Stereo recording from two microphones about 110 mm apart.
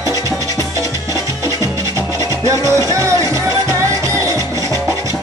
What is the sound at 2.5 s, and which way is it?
Music, 30° right (ahead or behind).